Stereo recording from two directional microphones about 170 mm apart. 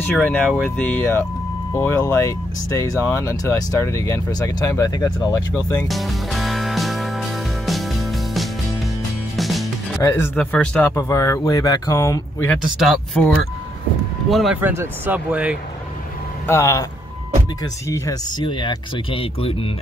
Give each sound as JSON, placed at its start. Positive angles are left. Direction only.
{"t": 0.0, "sound": "speech", "side_deg": 10}
{"t": 5.9, "sound": "music", "side_deg": 0}
{"t": 10.0, "sound": "speech", "side_deg": 15}
{"t": 12.6, "sound": "speech", "side_deg": 0}
{"t": 14.6, "sound": "speech", "side_deg": -15}
{"t": 16.4, "sound": "speech", "side_deg": 15}
{"t": 17.8, "sound": "speech", "side_deg": 20}